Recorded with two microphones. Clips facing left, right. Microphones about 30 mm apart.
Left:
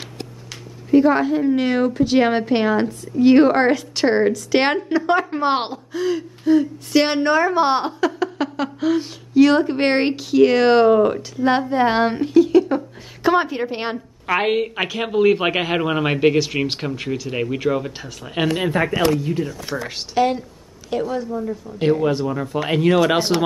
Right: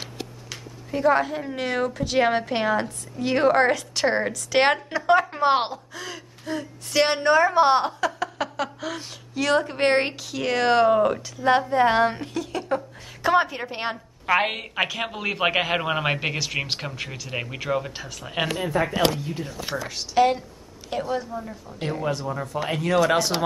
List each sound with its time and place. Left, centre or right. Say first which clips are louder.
0.8 s a woman's voice: left 6 dB; centre
10.9 s a woman's voice: left 4 dB; centre
11.3 s a woman's voice: left 1 dB; centre
14.2 s a woman's voice: left 3 dB; centre
18.5 s speech: left 5 dB; left
20.2 s a woman's voice: left 1 dB; centre
22.5 s speech: left 6 dB; left